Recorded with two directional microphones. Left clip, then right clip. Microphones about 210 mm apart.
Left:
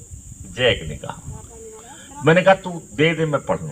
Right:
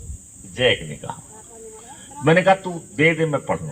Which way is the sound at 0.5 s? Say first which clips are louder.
Even; 25° left (ahead or behind).